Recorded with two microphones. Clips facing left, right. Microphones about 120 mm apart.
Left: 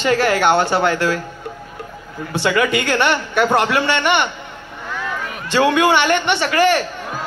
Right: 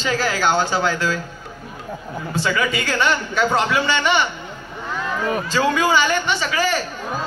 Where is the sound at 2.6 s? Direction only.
65° left (ahead or behind).